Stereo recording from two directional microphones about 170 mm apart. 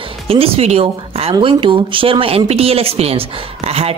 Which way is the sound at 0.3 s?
35° right (ahead or behind).